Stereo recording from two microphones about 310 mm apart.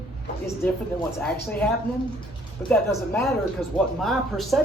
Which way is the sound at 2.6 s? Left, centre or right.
Centre.